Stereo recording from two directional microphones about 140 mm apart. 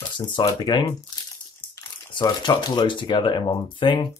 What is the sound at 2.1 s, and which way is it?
Speech, 30° left (ahead or behind).